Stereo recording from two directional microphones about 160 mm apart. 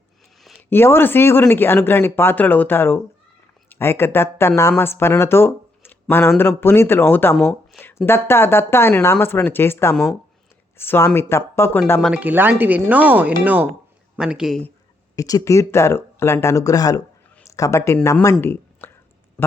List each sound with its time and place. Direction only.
0.7 s speech: 15° left (ahead or behind)
7.3 s speech: centre (ahead or behind)
8.0 s speech: 15° left (ahead or behind)
9.9 s speech: centre (ahead or behind)
10.8 s speech: 15° left (ahead or behind)
12.1 s speech: 10° right (ahead or behind)
15.1 s speech: 20° left (ahead or behind)